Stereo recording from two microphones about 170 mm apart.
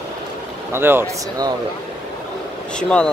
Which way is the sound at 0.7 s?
15° right (ahead or behind).